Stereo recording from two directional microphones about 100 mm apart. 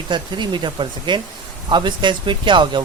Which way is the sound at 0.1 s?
50° right (ahead or behind).